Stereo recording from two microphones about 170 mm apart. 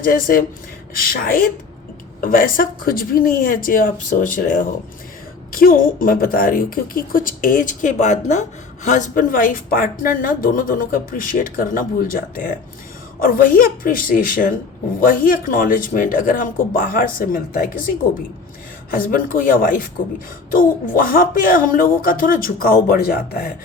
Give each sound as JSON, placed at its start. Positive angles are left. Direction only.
{"t": 0.0, "sound": "a woman's voice", "side_deg": 55}
{"t": 18.9, "sound": "a woman's voice", "side_deg": 55}